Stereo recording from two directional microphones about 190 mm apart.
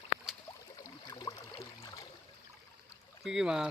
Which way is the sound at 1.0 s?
20° left (ahead or behind).